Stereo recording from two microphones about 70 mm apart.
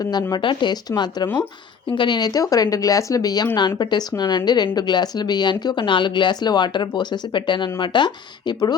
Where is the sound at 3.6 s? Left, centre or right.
Left.